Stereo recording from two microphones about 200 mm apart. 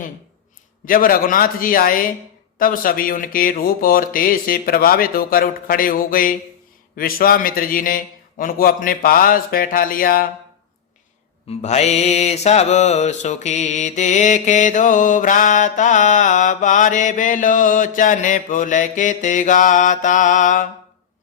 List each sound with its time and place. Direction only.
0.9 s speech: 45° left (ahead or behind)
11.6 s mantra: 35° left (ahead or behind)